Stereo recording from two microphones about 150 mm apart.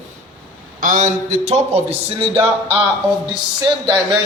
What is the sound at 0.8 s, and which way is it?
A man's voice, 55° right (ahead or behind).